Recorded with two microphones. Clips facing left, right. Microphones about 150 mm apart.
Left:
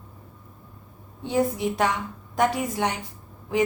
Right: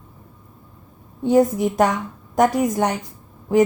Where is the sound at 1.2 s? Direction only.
45° right (ahead or behind).